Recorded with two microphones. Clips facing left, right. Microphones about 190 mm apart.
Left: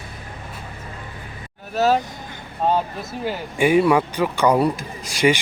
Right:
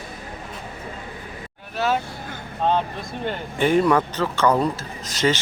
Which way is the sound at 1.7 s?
40° left (ahead or behind).